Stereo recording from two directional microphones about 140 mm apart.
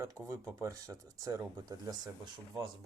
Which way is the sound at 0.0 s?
20° right (ahead or behind).